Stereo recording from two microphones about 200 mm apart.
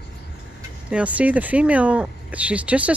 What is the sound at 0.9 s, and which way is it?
Speech, 5° right (ahead or behind).